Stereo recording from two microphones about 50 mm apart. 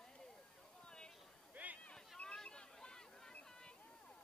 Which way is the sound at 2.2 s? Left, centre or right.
Centre.